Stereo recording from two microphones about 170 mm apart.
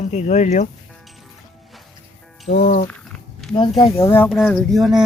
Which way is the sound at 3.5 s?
25° left (ahead or behind).